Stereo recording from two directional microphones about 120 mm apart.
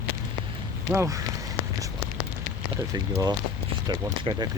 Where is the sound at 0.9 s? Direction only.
25° right (ahead or behind).